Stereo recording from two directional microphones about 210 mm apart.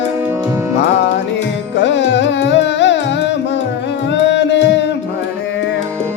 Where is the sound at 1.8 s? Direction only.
55° left (ahead or behind).